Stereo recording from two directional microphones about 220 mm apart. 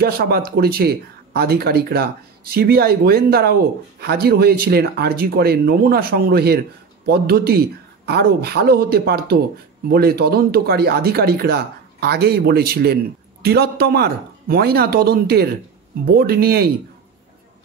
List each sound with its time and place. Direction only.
0.0 s speech: 45° right (ahead or behind)